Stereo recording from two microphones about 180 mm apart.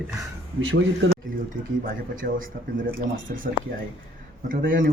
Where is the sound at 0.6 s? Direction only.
90° right.